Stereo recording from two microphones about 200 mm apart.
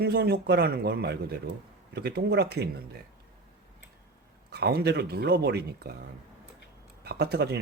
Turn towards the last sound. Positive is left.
turn(degrees=-55)  # may be behind; listen again after turning